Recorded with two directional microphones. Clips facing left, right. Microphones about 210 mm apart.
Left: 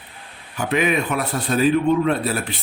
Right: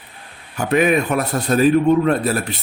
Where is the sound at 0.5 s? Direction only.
45° right (ahead or behind).